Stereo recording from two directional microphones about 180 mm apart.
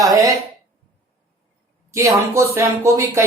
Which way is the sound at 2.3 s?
15° right (ahead or behind).